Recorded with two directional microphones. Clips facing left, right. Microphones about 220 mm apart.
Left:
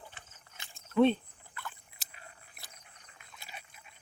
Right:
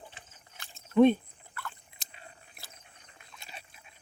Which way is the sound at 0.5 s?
20° left (ahead or behind).